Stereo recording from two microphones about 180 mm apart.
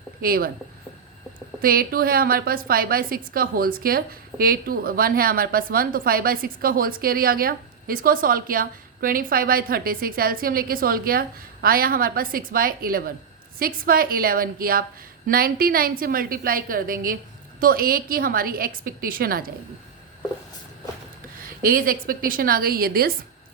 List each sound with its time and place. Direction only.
0.2 s a woman's voice: 55° right (ahead or behind)
1.6 s a woman's voice: 55° right (ahead or behind)
21.6 s a woman's voice: 50° right (ahead or behind)